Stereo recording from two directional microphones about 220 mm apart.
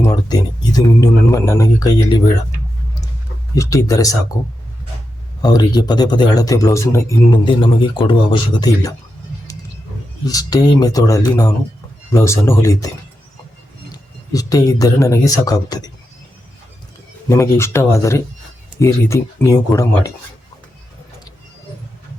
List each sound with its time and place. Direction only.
0.0 s speech: 20° left (ahead or behind)
3.5 s speech: 15° left (ahead or behind)
5.4 s speech: 20° left (ahead or behind)
10.2 s speech: 15° left (ahead or behind)
13.9 s speech: 15° left (ahead or behind)
17.2 s speech: 10° left (ahead or behind)